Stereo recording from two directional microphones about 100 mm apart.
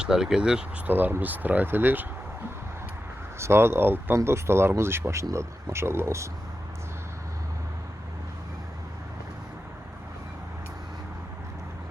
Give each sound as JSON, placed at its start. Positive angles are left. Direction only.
{"t": 0.0, "sound": "speech", "side_deg": -5}
{"t": 0.9, "sound": "speech", "side_deg": -20}
{"t": 3.3, "sound": "speech", "side_deg": -25}